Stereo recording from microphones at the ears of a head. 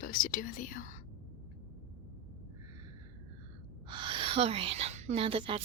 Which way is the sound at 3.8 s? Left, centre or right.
Right.